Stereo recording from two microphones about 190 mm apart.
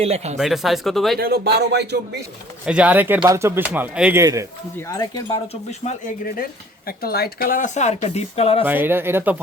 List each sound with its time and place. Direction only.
0.0 s speech: 35° right (ahead or behind)
0.3 s speech: centre (ahead or behind)
1.2 s speech: 55° right (ahead or behind)
2.6 s speech: 5° right (ahead or behind)
4.8 s speech: 20° left (ahead or behind)
5.8 s speech: 40° left (ahead or behind)
8.6 s speech: 10° right (ahead or behind)